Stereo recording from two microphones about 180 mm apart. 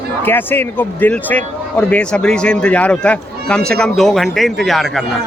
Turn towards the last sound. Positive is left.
turn(degrees=0)  # may be behind; listen again after turning